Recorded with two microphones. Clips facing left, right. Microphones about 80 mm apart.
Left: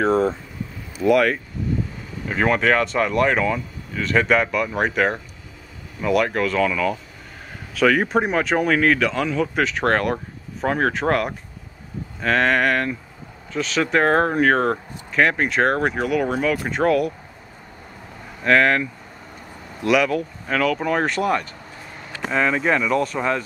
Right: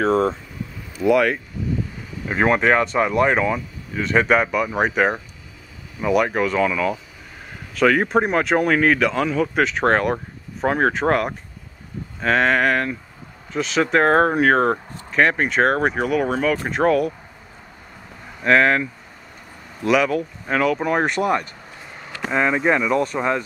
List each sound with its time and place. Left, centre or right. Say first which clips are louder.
0.0 s speech: even; centre
2.2 s speech: right 1 dB; centre
18.4 s speech: right 1 dB; centre
20.4 s speech: right 1 dB; centre